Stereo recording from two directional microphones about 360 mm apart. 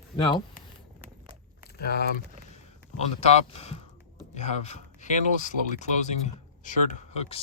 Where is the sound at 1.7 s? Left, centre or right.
Left.